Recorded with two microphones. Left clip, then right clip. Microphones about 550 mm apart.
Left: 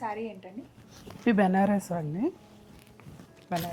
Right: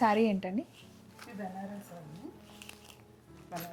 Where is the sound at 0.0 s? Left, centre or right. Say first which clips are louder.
Right 7 dB; right.